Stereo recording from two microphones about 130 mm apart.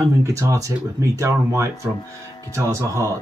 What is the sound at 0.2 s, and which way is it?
Speech, 25° right (ahead or behind).